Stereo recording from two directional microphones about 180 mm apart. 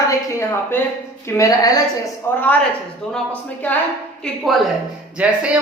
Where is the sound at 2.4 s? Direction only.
10° left (ahead or behind).